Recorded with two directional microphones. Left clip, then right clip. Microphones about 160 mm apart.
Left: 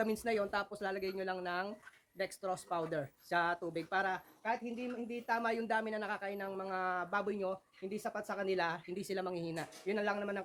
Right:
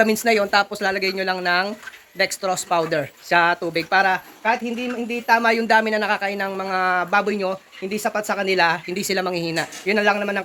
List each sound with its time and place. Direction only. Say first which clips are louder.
0.0 s speech: right 17 dB; 15° right (ahead or behind)